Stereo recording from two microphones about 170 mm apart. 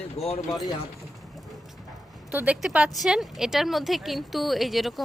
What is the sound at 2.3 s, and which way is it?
Speech, 10° right (ahead or behind).